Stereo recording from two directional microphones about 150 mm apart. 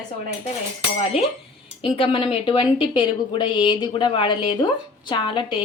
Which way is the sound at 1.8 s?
35° left (ahead or behind).